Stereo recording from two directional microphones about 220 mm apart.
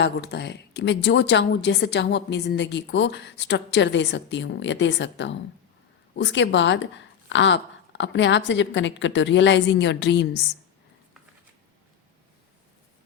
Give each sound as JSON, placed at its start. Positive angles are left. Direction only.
{"t": 0.0, "sound": "a woman's voice", "side_deg": 50}